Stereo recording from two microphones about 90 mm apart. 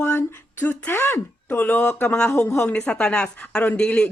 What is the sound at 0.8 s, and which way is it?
Speech, 25° left (ahead or behind).